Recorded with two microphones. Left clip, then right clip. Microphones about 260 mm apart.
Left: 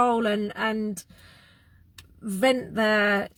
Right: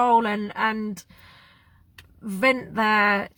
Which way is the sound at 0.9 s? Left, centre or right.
Centre.